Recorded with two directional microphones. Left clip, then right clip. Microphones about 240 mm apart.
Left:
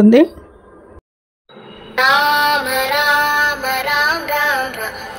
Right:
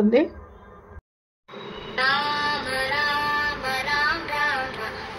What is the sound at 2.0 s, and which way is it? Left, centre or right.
Music, left.